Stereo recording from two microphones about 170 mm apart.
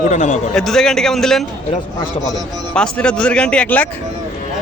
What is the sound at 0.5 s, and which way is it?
Speech, centre (ahead or behind).